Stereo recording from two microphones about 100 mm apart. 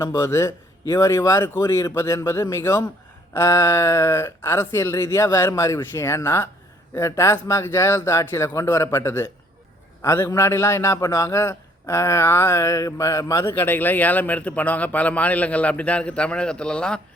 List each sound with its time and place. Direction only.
0.0 s a man's voice: 25° left (ahead or behind); by 17.0 s 10° left (ahead or behind)